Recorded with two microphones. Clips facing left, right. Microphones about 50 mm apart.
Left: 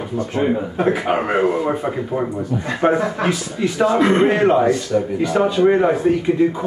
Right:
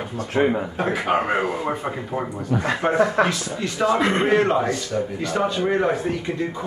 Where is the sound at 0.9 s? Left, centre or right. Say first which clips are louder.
Left 2 dB; centre.